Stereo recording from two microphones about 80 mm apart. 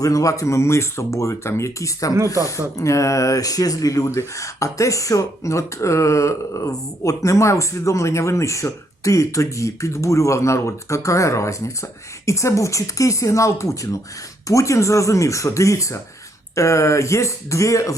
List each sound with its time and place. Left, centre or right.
0.0 s speech: left